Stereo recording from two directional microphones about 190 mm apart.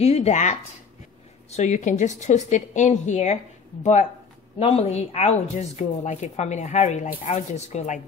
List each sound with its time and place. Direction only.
0.0 s a woman's voice: 35° left (ahead or behind)
4.6 s a woman's voice: 30° left (ahead or behind)